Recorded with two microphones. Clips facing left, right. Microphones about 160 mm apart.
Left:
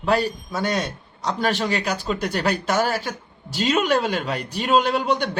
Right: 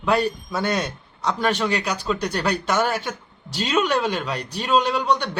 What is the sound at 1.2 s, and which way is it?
Speech, 40° left (ahead or behind).